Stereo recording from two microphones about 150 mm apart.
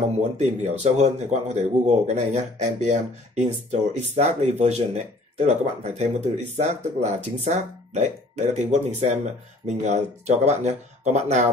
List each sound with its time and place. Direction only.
0.4 s speech: 50° right (ahead or behind)